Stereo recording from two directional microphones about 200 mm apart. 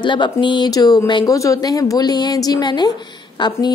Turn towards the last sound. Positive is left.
turn(degrees=20)  # may be behind; listen again after turning